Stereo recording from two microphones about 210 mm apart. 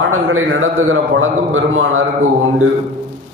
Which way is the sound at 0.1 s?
75° right (ahead or behind).